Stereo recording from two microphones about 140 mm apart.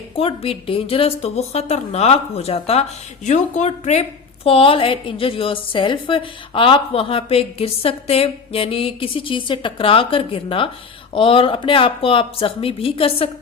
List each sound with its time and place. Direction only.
0.2 s a woman's voice: 40° left (ahead or behind)
4.4 s a woman's voice: 40° left (ahead or behind)